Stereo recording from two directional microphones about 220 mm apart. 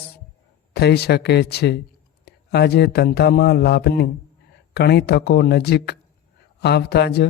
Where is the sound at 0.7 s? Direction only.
50° left (ahead or behind).